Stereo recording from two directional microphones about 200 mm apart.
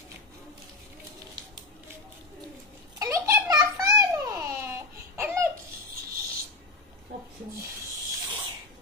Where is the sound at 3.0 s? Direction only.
15° right (ahead or behind).